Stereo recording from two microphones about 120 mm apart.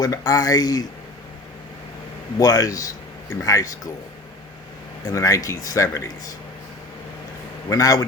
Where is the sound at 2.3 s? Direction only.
30° left (ahead or behind).